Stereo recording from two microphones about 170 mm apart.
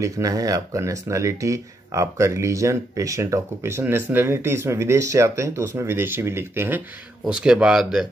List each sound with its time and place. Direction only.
0.0 s speech: 20° right (ahead or behind); by 8.1 s 5° right (ahead or behind)